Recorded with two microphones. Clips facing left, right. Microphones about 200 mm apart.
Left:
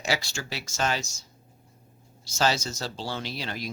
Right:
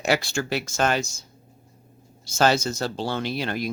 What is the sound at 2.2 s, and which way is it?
Speech, 55° right (ahead or behind).